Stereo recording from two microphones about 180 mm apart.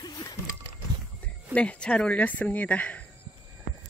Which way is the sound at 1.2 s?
5° left (ahead or behind).